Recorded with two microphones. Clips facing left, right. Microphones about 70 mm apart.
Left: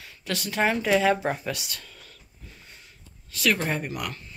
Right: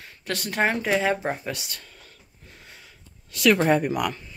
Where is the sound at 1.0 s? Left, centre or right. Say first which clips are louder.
Left 1 dB; right.